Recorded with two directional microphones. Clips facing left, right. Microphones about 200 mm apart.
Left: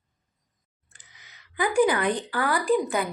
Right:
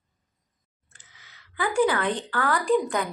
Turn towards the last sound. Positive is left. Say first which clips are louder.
# even
turn(degrees=5)  # may be behind; listen again after turning